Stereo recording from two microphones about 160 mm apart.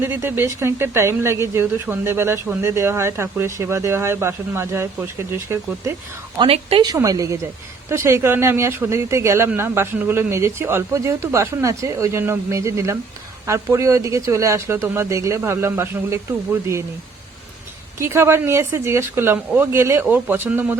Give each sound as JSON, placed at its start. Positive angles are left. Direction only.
{"t": 0.0, "sound": "speech", "side_deg": -15}
{"t": 6.4, "sound": "speech", "side_deg": -35}
{"t": 6.8, "sound": "speech", "side_deg": -20}
{"t": 18.0, "sound": "speech", "side_deg": -15}